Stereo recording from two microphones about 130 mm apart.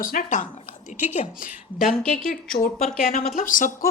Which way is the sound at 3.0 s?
90° left.